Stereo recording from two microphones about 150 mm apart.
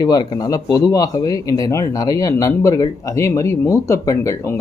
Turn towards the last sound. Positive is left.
turn(degrees=20)  # may be behind; listen again after turning